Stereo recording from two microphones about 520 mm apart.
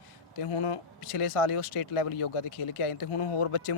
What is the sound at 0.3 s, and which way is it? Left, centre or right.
Speech, left.